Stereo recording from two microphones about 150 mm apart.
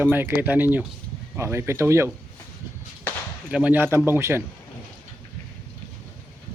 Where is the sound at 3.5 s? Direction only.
10° right (ahead or behind).